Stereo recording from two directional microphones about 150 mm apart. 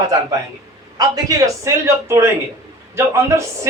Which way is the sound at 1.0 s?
25° right (ahead or behind).